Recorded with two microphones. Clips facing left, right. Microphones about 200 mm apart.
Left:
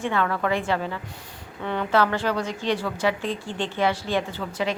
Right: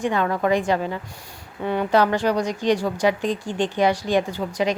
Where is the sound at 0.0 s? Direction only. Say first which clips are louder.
Right 3 dB; 15° right (ahead or behind).